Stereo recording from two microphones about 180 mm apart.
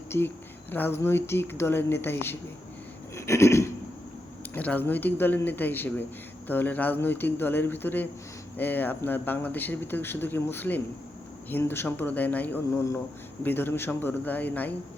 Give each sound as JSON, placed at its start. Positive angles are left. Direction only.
{"t": 0.7, "sound": "speech", "side_deg": 10}